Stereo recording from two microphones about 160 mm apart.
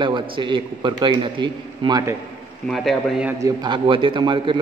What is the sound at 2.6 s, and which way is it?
Speech, centre (ahead or behind).